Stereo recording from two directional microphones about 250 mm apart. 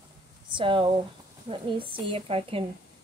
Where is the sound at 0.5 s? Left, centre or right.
Centre.